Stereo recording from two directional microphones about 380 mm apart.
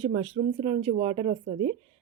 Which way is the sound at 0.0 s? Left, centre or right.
Centre.